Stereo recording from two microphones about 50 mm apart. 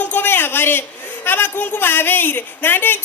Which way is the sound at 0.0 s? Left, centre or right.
Left.